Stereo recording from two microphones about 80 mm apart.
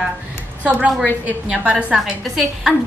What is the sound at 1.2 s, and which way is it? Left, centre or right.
Speech, centre.